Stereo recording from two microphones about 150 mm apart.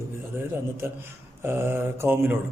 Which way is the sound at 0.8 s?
15° right (ahead or behind).